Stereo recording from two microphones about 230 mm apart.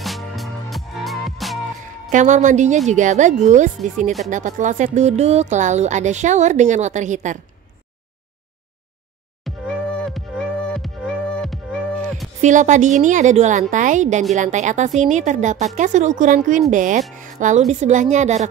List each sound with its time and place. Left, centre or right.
0.0 s music: centre
2.0 s a woman's voice: right
9.4 s music: centre
12.4 s a woman's voice: right